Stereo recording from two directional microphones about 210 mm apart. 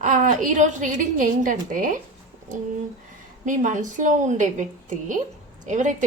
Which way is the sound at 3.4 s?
35° right (ahead or behind).